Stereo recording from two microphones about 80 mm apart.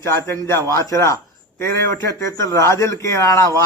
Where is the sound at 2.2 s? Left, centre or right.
Left.